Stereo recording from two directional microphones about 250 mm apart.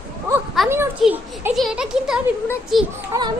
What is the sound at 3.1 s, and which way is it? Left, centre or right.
Speech, centre.